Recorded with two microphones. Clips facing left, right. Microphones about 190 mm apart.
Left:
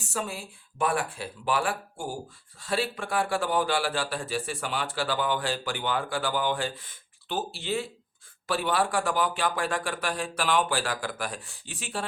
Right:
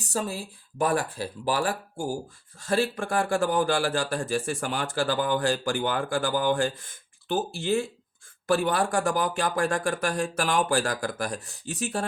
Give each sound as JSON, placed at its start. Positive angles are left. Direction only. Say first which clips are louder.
{"t": 0.0, "sound": "a man's voice", "louder": "right 3 dB", "side_deg": -35}